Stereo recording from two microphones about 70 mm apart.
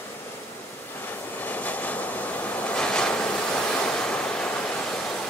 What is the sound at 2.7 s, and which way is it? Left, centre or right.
Waves, centre.